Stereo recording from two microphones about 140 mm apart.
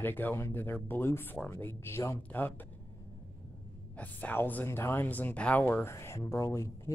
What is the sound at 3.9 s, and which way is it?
Speech, 10° left (ahead or behind).